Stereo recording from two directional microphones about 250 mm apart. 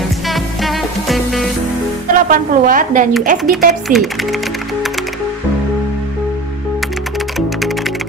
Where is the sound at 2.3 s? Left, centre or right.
Right.